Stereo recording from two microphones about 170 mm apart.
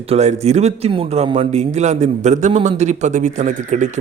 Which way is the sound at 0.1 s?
40° right (ahead or behind).